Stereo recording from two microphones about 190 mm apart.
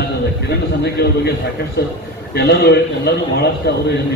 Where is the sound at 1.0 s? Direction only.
55° left (ahead or behind).